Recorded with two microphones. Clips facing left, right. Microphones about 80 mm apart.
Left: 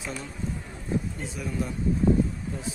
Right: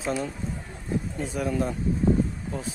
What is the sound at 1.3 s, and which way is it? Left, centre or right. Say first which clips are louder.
Speech: right 5 dB; right.